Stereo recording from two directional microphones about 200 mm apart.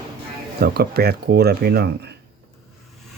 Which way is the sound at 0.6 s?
50° right (ahead or behind).